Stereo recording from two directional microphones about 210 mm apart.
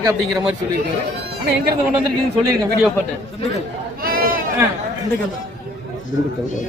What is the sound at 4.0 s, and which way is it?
Sheep, 45° right (ahead or behind).